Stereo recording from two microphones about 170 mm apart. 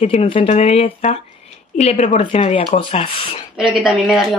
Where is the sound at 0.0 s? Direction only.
35° left (ahead or behind).